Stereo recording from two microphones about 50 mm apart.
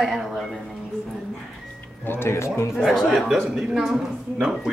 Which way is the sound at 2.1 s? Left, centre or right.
Left.